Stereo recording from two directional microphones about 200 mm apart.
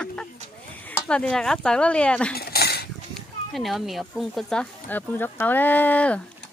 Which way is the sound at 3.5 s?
Centre (ahead or behind).